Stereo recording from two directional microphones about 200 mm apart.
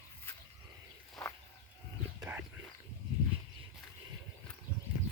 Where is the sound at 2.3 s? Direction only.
10° right (ahead or behind).